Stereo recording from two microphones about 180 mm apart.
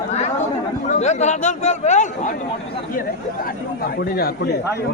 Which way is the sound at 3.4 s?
55° left (ahead or behind).